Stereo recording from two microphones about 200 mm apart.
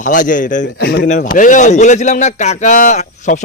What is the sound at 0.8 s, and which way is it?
Speech, 60° left (ahead or behind).